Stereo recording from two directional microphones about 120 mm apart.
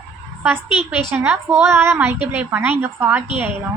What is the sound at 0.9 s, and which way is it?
A child's voice, 10° right (ahead or behind).